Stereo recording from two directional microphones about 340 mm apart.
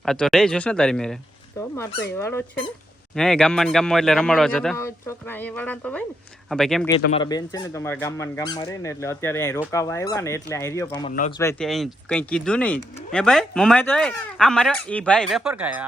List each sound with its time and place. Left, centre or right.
0.0 s speech: centre
7.0 s speech: centre
11.3 s speech: centre